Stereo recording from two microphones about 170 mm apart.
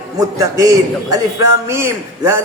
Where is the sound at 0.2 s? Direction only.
20° right (ahead or behind).